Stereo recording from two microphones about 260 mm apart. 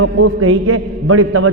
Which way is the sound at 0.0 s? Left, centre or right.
Right.